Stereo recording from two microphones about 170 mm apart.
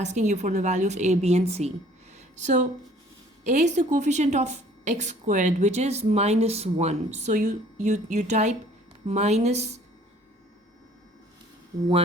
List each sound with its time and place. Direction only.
0.0 s a woman's voice: 45° right (ahead or behind)
2.1 s a sound: 45° right (ahead or behind)
3.5 s a woman's voice: 45° right (ahead or behind)